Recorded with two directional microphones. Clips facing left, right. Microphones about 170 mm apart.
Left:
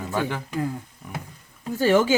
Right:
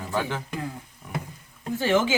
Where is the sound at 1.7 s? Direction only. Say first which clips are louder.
Left 4 dB; 40° left (ahead or behind).